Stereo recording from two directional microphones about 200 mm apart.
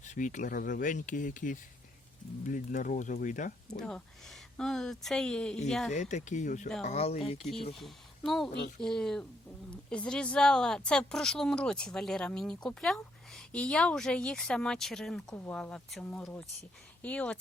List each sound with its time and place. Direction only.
0.0 s speech: 40° left (ahead or behind)
3.8 s speech: 5° left (ahead or behind)
5.9 s speech: 35° left (ahead or behind)
7.8 s speech: centre (ahead or behind)